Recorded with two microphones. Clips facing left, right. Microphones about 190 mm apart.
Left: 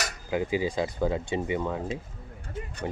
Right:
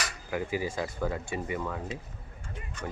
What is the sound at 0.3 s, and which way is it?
Speech, 20° left (ahead or behind).